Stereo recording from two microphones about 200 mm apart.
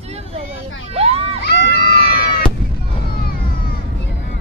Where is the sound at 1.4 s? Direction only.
55° left (ahead or behind).